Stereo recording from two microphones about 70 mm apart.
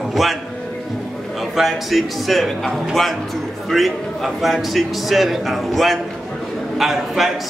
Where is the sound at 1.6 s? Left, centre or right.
Centre.